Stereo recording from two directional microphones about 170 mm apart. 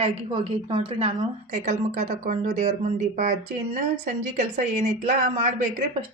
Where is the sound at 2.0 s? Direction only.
55° right (ahead or behind).